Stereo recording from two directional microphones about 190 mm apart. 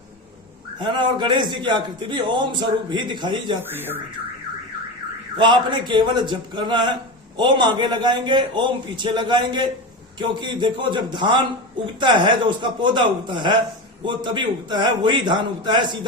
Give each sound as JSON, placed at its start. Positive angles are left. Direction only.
{"t": 0.8, "sound": "a man's voice", "side_deg": -25}
{"t": 3.6, "sound": "speech", "side_deg": -10}
{"t": 5.4, "sound": "a man's voice", "side_deg": -25}